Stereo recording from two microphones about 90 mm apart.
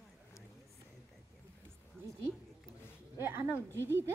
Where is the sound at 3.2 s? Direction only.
20° right (ahead or behind).